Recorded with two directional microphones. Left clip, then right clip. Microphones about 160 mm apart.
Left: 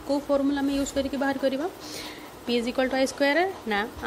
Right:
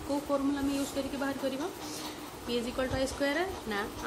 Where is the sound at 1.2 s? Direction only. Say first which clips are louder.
Left 9 dB; 40° left (ahead or behind).